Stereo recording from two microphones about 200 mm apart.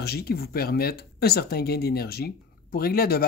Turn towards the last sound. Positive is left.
turn(degrees=50)  # may be behind; listen again after turning